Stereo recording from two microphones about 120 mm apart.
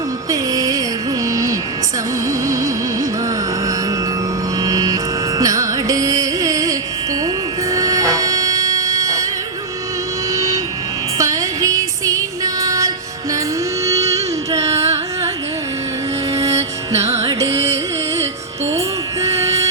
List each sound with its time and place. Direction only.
0.3 s music: 30° right (ahead or behind)
4.6 s music: 30° right (ahead or behind)
5.4 s carnatic music: 30° right (ahead or behind)
7.7 s music: 30° right (ahead or behind)
10.3 s vehicle: 25° right (ahead or behind)
11.2 s music: 30° right (ahead or behind)
16.3 s music: 25° right (ahead or behind)
18.8 s music: 25° right (ahead or behind)